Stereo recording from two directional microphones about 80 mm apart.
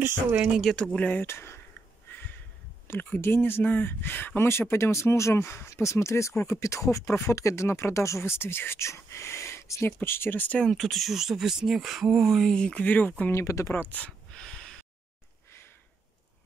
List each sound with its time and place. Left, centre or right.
0.0 s speech: right
0.6 s speech: centre
1.0 s speech: left
2.0 s a sound: left
2.9 s speech: left
10.6 s speech: centre
12.5 s speech: centre
13.3 s speech: left
13.7 s a sound: centre